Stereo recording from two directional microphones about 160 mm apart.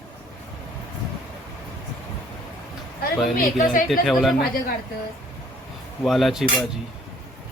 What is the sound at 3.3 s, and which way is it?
Speech, 55° left (ahead or behind).